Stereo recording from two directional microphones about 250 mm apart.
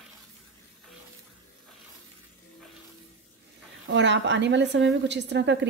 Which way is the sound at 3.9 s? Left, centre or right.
Right.